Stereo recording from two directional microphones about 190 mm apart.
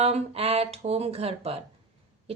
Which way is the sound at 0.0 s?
30° right (ahead or behind).